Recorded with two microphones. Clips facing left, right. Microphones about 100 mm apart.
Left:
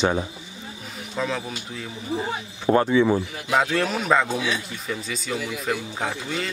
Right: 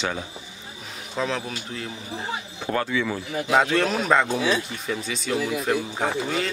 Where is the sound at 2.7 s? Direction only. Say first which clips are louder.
Left 7 dB; 25° left (ahead or behind).